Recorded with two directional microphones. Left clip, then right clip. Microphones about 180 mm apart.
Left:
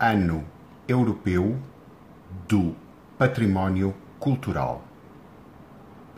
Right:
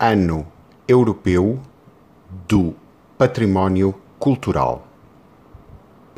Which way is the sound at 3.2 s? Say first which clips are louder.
Right 7 dB; 50° right (ahead or behind).